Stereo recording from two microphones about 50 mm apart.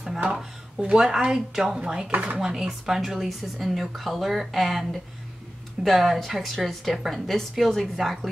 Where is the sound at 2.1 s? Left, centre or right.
Right.